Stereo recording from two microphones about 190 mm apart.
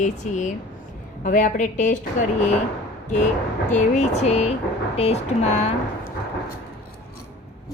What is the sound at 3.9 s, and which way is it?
A woman's voice, 35° left (ahead or behind).